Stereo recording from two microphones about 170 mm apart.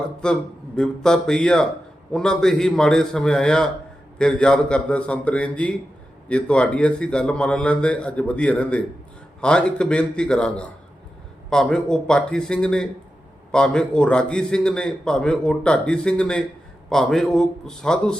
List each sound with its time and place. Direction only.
0.2 s a man's voice: 5° left (ahead or behind)